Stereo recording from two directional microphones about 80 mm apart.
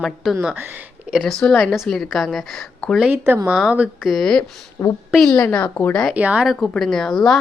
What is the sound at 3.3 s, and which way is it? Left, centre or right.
Speech, right.